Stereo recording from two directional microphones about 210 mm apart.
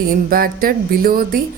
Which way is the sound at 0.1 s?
45° right (ahead or behind).